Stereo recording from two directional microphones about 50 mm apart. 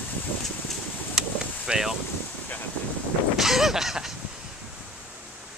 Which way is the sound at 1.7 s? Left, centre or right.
Centre.